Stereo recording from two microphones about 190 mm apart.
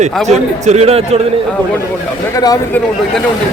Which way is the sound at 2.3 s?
20° left (ahead or behind).